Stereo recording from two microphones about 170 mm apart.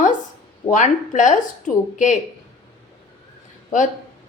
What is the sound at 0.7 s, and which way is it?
Speech, 45° left (ahead or behind).